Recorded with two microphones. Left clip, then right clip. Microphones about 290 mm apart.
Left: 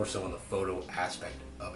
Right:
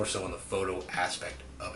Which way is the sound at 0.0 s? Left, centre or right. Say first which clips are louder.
Right 1 dB; centre.